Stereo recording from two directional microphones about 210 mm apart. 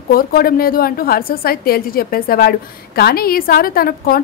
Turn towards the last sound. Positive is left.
turn(degrees=45)  # may be behind; listen again after turning